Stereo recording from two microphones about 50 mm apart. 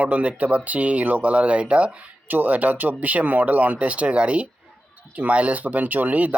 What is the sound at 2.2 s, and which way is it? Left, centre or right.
Speech, right.